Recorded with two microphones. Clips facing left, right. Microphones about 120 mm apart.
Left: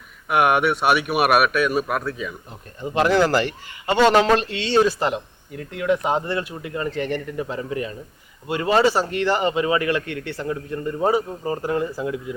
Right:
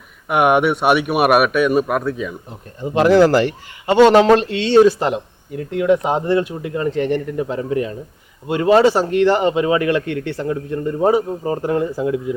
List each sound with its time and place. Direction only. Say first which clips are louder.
0.3 s a man's voice: right 4 dB; centre (ahead or behind)
2.8 s a man's voice: right 6 dB; 15° right (ahead or behind)
4.9 s a man's voice: right 5 dB; centre (ahead or behind)
11.3 s speech: right 5 dB; 20° right (ahead or behind)
11.6 s a man's voice: right 4 dB; 5° right (ahead or behind)